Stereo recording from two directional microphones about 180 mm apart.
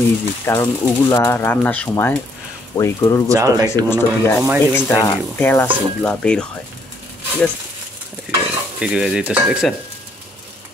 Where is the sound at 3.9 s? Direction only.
10° left (ahead or behind).